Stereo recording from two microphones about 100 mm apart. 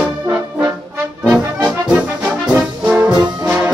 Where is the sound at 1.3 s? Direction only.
10° right (ahead or behind).